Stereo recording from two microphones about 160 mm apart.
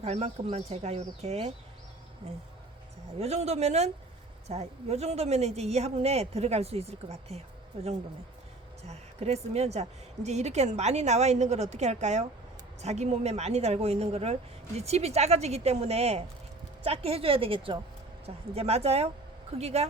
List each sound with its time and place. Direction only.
0.0 s speech: 40° right (ahead or behind)
3.2 s a woman's voice: 40° right (ahead or behind)